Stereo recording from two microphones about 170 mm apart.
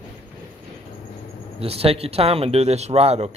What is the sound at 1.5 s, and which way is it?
Speech, 35° right (ahead or behind).